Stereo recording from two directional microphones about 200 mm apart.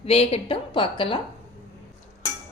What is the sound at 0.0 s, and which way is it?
A woman's voice, 30° left (ahead or behind).